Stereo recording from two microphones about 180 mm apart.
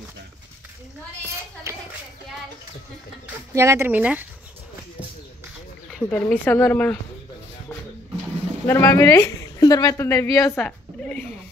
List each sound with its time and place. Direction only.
1.7 s speech: 15° right (ahead or behind)
3.5 s speech: 15° right (ahead or behind)
5.9 s speech: 5° left (ahead or behind)
8.6 s a woman's voice: 15° left (ahead or behind)